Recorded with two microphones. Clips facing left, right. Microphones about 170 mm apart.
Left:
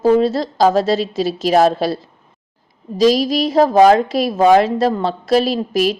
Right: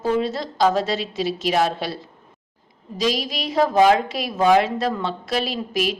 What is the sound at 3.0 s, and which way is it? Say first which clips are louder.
A woman's voice: left 10 dB; 40° left (ahead or behind).